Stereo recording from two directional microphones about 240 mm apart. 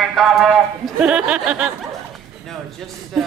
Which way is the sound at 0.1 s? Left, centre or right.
Centre.